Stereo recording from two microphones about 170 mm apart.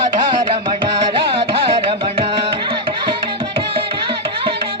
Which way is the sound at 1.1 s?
30° right (ahead or behind).